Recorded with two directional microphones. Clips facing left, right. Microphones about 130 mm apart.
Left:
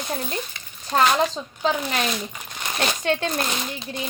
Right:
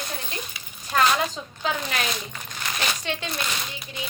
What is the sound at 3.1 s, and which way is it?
Speech, 45° left (ahead or behind).